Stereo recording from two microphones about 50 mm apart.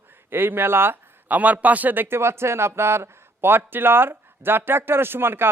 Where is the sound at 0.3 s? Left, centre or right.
Right.